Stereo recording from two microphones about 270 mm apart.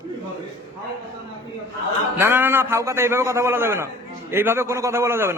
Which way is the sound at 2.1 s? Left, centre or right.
Centre.